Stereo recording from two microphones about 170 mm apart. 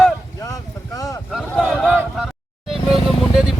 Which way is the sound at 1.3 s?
5° left (ahead or behind).